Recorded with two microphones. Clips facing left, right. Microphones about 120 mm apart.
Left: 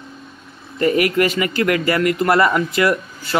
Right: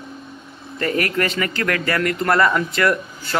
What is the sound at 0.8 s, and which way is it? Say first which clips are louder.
Speech: left 5 dB; 15° left (ahead or behind).